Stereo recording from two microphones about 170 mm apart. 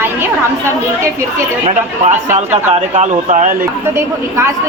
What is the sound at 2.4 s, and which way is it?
Speech, 40° right (ahead or behind).